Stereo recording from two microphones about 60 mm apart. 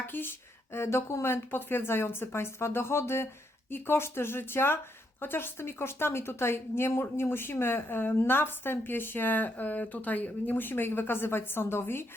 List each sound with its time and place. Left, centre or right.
0.1 s a woman's voice: left